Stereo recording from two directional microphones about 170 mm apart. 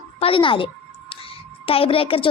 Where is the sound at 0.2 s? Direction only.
30° left (ahead or behind).